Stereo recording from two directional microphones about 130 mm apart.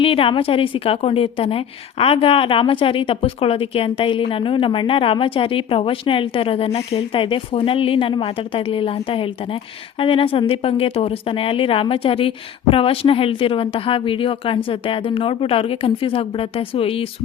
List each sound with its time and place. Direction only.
0.0 s a woman's voice: 45° left (ahead or behind)